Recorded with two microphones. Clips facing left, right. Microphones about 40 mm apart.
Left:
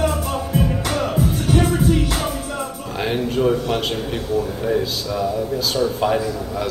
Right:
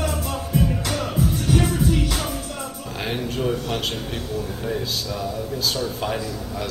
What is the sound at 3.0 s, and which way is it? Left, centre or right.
A man's voice, centre.